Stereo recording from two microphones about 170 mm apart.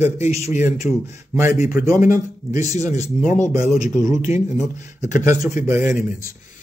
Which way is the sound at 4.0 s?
15° right (ahead or behind).